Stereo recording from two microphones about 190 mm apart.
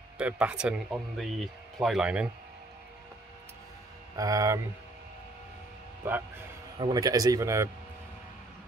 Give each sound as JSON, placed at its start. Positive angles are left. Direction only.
{"t": 0.2, "sound": "speech", "side_deg": -5}
{"t": 4.2, "sound": "speech", "side_deg": -15}
{"t": 6.8, "sound": "speech", "side_deg": -20}